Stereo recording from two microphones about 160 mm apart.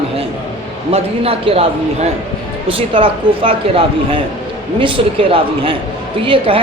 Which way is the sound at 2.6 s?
35° right (ahead or behind).